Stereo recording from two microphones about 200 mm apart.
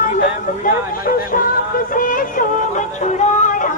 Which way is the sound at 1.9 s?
45° left (ahead or behind).